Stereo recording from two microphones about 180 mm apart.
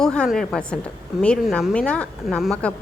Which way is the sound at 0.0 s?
5° left (ahead or behind).